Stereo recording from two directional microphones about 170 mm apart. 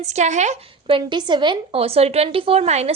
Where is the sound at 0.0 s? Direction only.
45° right (ahead or behind).